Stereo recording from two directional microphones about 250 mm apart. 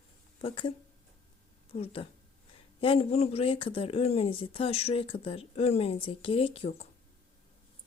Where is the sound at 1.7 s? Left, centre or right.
Left.